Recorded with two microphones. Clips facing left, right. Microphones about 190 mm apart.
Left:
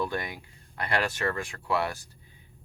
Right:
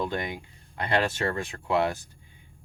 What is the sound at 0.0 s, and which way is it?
Speech, 20° right (ahead or behind).